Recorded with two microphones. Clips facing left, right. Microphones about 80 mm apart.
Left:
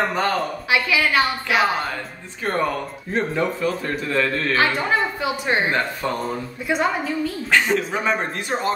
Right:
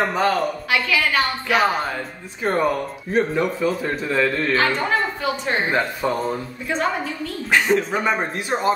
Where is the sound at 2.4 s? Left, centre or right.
Centre.